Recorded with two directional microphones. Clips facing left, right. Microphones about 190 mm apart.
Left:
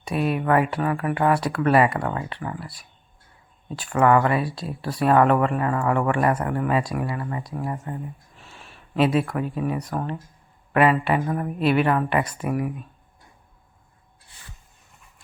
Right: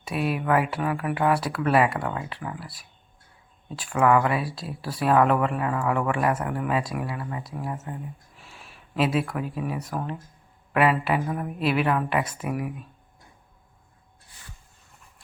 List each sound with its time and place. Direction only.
0.0 s speech: centre (ahead or behind)